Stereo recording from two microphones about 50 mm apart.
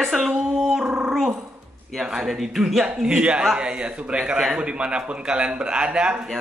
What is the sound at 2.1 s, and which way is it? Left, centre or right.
Speech, centre.